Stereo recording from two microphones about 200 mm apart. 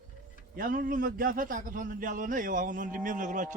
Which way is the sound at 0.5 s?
45° right (ahead or behind).